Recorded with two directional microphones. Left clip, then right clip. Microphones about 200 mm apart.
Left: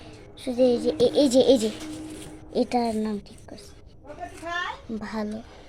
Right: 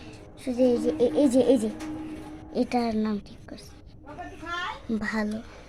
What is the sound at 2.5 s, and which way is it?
A woman's voice, 5° left (ahead or behind).